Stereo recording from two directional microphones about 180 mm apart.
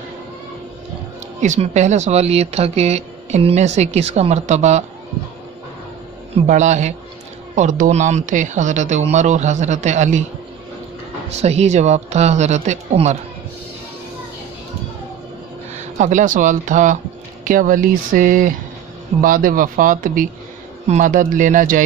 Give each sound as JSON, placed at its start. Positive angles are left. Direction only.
{"t": 1.4, "sound": "speech", "side_deg": -40}
{"t": 6.3, "sound": "speech", "side_deg": -40}
{"t": 11.2, "sound": "speech", "side_deg": -35}
{"t": 16.0, "sound": "speech", "side_deg": -45}